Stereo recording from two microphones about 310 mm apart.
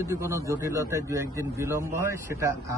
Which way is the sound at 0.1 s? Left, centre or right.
Centre.